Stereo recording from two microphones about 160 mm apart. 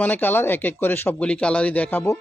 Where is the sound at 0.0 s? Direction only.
10° left (ahead or behind).